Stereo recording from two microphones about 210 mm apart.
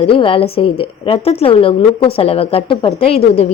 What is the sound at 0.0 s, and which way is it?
A woman's voice, 25° left (ahead or behind).